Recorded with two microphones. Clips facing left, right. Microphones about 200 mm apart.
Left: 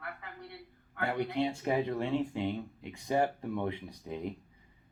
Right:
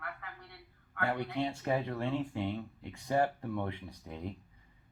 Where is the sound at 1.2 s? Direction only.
15° left (ahead or behind).